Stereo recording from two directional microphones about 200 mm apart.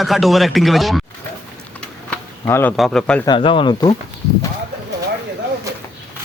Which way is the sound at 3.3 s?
25° left (ahead or behind).